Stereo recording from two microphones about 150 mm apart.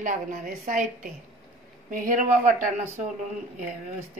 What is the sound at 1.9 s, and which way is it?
Speech, 60° right (ahead or behind).